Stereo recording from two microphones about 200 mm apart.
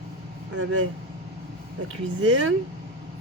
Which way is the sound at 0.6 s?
90° right.